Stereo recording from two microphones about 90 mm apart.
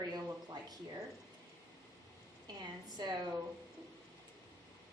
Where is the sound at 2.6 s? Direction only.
50° right (ahead or behind).